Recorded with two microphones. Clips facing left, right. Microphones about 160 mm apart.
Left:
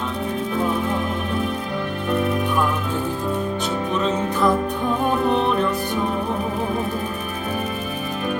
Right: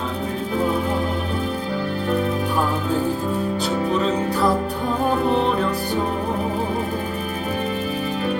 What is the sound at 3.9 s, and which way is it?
Music, 35° right (ahead or behind).